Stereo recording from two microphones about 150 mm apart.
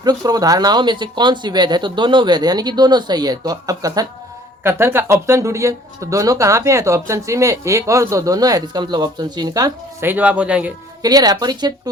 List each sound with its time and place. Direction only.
0.0 s speech: 25° right (ahead or behind)
10.1 s speech: 10° right (ahead or behind)
11.0 s speech: 25° right (ahead or behind)